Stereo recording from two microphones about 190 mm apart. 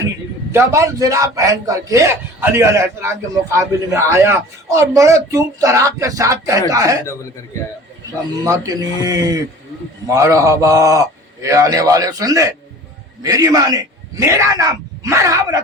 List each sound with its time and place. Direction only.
0.5 s a man's voice: 15° right (ahead or behind)
8.4 s a man's voice: 20° right (ahead or behind)